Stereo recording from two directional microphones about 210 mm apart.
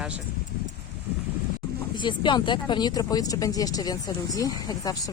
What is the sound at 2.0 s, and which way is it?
Speech, 20° left (ahead or behind).